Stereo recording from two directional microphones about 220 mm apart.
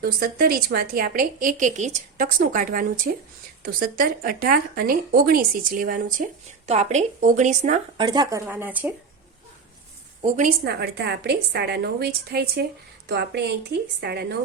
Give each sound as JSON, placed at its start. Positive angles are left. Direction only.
{"t": 0.0, "sound": "a woman's voice", "side_deg": -45}
{"t": 7.9, "sound": "speech", "side_deg": -20}
{"t": 10.2, "sound": "a woman's voice", "side_deg": -30}